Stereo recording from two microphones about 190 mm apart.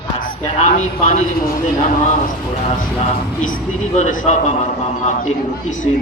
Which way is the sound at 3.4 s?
40° left (ahead or behind).